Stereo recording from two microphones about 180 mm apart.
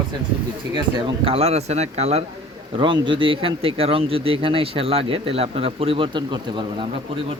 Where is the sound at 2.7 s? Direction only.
25° right (ahead or behind).